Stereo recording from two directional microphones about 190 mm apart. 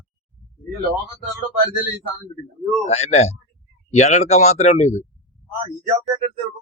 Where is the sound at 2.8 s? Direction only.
35° left (ahead or behind).